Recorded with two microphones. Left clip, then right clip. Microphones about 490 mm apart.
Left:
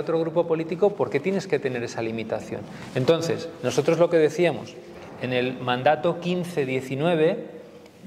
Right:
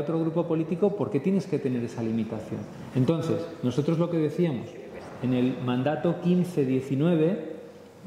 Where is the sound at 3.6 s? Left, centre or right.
Left.